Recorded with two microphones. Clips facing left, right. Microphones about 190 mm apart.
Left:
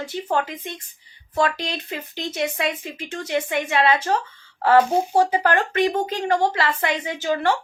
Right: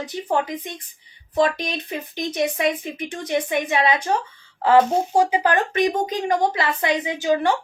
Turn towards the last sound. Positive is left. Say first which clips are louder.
# right 2 dB
turn(degrees=-15)  # may be behind; listen again after turning